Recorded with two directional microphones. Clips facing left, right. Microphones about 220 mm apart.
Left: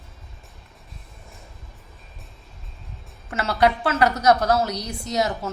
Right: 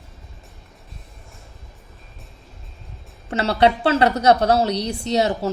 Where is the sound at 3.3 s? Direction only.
30° right (ahead or behind).